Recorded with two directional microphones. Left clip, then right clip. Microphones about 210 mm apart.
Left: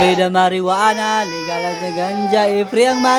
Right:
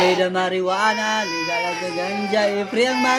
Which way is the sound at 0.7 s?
30° left (ahead or behind).